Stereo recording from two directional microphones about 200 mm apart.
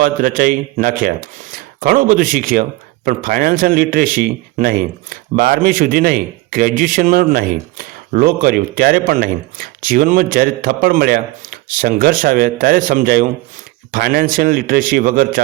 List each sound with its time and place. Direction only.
0.0 s speech: 45° right (ahead or behind)